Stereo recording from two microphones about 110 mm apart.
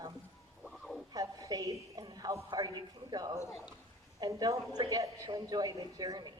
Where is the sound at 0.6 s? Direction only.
Centre (ahead or behind).